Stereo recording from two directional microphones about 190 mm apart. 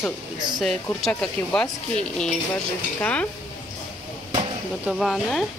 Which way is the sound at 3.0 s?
5° left (ahead or behind).